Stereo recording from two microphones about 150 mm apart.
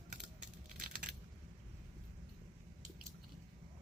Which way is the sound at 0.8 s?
70° right (ahead or behind).